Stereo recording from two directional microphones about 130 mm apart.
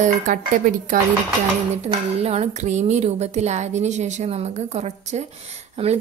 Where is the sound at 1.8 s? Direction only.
55° right (ahead or behind).